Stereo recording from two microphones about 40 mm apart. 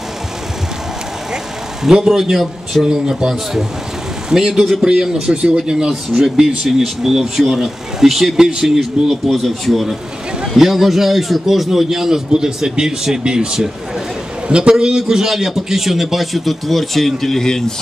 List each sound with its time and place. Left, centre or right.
1.3 s a sound: centre
2.9 s a man's voice: centre
4.8 s speech: centre
8.4 s speech: centre
9.1 s a man's voice: centre